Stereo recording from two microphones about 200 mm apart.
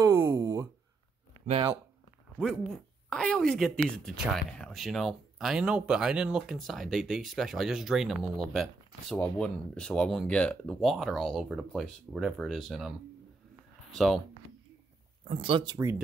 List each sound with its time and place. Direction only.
0.0 s a sound: 15° right (ahead or behind)
1.5 s speech: 20° right (ahead or behind)
2.7 s speech: 5° left (ahead or behind)
13.9 s speech: centre (ahead or behind)
15.2 s speech: 25° right (ahead or behind)